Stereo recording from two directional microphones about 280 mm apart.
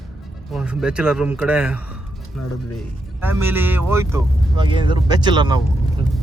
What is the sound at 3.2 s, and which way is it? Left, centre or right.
A man's voice, centre.